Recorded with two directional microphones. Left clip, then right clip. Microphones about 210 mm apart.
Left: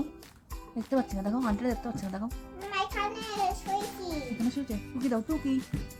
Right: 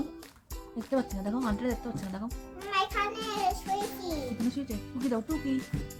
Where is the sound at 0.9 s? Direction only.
15° left (ahead or behind).